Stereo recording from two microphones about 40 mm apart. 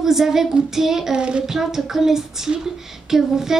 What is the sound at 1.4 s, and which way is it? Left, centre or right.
A child's voice, centre.